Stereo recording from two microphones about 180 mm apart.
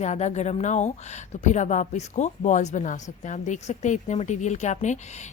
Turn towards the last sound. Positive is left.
turn(degrees=40)  # may be behind; listen again after turning